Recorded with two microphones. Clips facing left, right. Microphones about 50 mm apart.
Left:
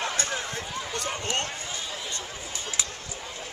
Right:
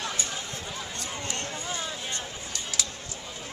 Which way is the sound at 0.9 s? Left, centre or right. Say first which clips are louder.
Left 8 dB; left.